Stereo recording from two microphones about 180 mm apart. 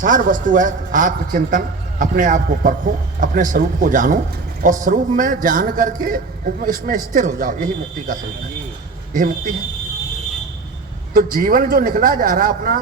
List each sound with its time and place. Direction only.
0.0 s a man's voice: 50° right (ahead or behind)
11.1 s a man's voice: 55° right (ahead or behind)